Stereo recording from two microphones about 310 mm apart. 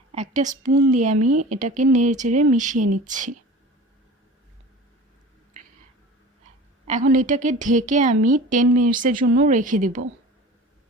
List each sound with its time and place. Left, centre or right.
0.1 s a woman's voice: right
6.8 s speech: right